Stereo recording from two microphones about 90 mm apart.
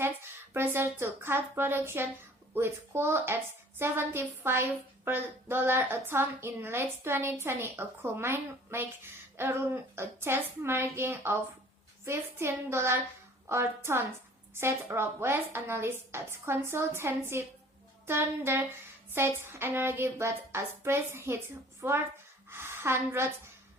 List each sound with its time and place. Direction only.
0.0 s a woman's voice: 25° right (ahead or behind)